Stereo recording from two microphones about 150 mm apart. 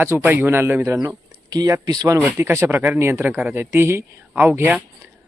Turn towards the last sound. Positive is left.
turn(degrees=-15)  # may be behind; listen again after turning